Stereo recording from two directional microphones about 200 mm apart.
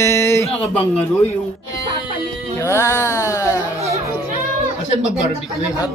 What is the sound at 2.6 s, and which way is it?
Carnatic music, 15° left (ahead or behind).